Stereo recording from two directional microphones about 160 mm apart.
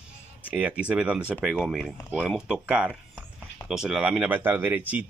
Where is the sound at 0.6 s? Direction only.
10° right (ahead or behind).